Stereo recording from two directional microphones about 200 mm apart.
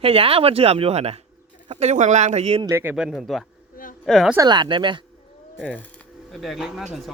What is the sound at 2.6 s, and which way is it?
Speech, 10° right (ahead or behind).